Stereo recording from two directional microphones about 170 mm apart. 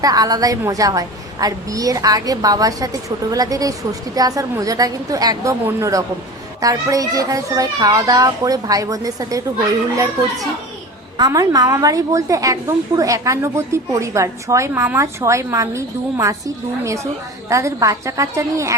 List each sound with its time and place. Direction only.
0.0 s a woman's voice: 20° right (ahead or behind)
11.2 s a woman's voice: 20° right (ahead or behind)